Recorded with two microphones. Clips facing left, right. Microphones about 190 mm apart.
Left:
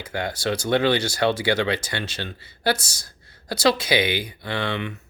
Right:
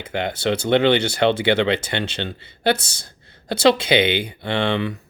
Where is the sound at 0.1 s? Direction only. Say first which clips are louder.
Right 4 dB; 25° right (ahead or behind).